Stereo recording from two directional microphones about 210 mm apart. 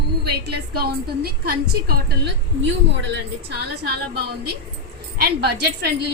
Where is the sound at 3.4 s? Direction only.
50° right (ahead or behind).